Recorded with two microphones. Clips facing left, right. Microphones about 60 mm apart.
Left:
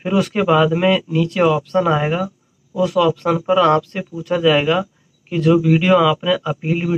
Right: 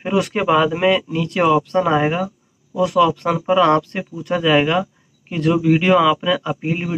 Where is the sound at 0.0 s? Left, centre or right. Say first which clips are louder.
Left 1 dB; centre.